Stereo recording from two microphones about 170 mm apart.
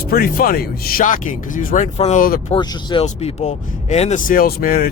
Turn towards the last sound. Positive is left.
turn(degrees=55)  # may be behind; listen again after turning